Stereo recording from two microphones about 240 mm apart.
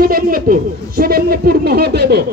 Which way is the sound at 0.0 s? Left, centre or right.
Right.